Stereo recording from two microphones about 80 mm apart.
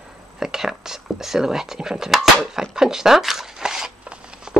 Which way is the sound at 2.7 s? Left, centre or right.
Centre.